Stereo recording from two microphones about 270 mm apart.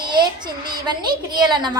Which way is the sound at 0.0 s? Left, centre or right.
Centre.